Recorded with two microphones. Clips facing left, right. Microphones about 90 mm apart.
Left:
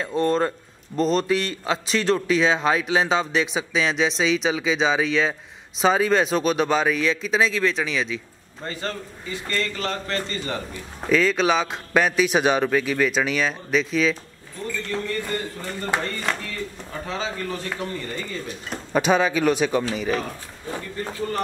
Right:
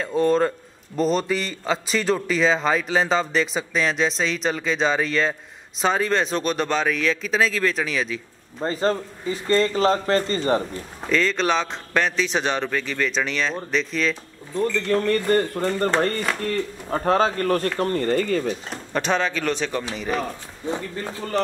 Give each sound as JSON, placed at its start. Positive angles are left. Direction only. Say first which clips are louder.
{"t": 0.0, "sound": "a man's voice", "louder": "right 2 dB", "side_deg": 0}
{"t": 8.5, "sound": "speech", "louder": "right 8 dB", "side_deg": -35}
{"t": 11.1, "sound": "speech", "louder": "left 2 dB", "side_deg": 5}
{"t": 14.9, "sound": "speech", "louder": "right 7 dB", "side_deg": -60}
{"t": 18.9, "sound": "speech", "louder": "left 3 dB", "side_deg": 10}
{"t": 20.0, "sound": "a man's voice", "louder": "left 1 dB", "side_deg": 0}